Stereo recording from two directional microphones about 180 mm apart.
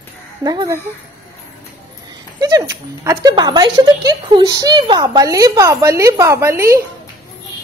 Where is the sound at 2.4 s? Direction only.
20° right (ahead or behind).